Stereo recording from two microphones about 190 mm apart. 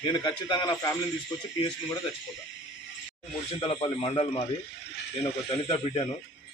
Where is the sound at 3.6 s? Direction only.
30° left (ahead or behind).